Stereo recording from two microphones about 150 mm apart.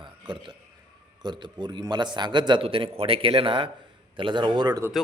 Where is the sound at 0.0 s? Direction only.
30° right (ahead or behind).